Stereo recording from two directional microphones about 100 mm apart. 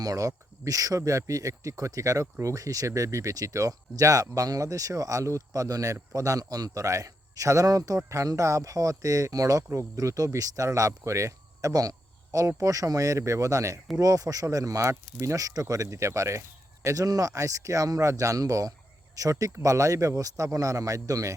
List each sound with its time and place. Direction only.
0.0 s a man's voice: 35° right (ahead or behind)